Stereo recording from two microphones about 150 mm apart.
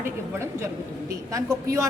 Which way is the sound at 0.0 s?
15° right (ahead or behind).